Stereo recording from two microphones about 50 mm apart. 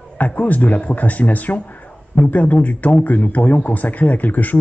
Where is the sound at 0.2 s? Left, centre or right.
Left.